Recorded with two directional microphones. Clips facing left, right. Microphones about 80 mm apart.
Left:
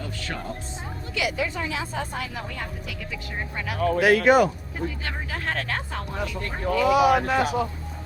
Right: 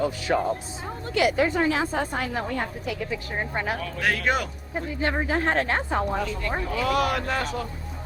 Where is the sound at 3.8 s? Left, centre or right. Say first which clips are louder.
Left 10 dB; left.